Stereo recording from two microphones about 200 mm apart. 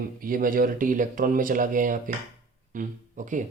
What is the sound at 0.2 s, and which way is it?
Speech, 45° right (ahead or behind).